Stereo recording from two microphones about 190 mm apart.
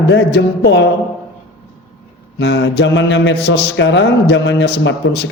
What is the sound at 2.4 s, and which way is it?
Speech, 65° left (ahead or behind).